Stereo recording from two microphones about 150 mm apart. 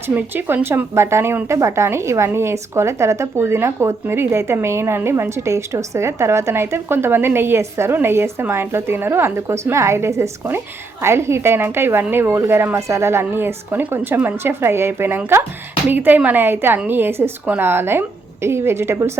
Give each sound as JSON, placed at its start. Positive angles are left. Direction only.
{"t": 0.1, "sound": "speech", "side_deg": -15}